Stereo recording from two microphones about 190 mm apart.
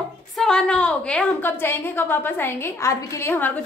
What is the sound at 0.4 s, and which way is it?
A woman's voice, 5° left (ahead or behind).